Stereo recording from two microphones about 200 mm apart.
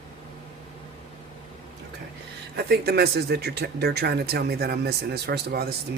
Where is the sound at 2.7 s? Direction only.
55° right (ahead or behind).